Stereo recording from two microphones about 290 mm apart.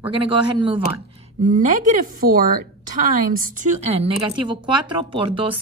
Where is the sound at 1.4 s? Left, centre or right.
Right.